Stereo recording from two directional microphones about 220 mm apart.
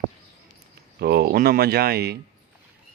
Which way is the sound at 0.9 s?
45° right (ahead or behind).